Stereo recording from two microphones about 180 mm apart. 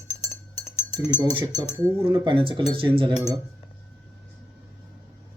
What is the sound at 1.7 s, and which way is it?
Speech, 30° right (ahead or behind).